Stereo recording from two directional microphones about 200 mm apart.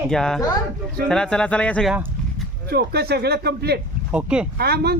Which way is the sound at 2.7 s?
55° right (ahead or behind).